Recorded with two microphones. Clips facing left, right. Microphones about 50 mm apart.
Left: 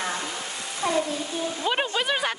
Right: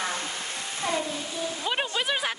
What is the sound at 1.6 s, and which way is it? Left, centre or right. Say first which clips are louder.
Speech: left 3 dB; centre.